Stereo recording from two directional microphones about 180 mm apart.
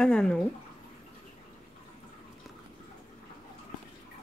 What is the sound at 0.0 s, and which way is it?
Speech, 5° left (ahead or behind).